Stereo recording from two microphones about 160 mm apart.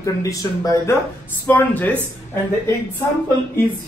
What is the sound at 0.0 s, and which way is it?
A woman's voice, 20° left (ahead or behind).